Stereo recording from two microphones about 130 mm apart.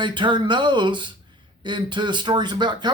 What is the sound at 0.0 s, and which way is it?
Speech, 40° right (ahead or behind).